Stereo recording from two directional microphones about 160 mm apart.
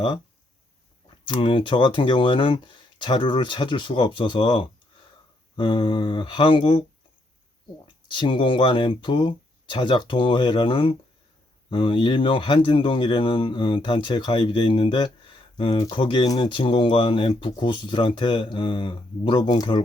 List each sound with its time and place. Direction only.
1.2 s speech: 30° left (ahead or behind)
8.0 s speech: 30° left (ahead or behind)